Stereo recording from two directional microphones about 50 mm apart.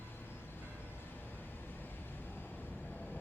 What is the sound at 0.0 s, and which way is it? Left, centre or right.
Vehicle, left.